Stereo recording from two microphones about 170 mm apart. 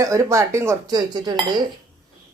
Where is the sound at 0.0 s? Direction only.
20° right (ahead or behind).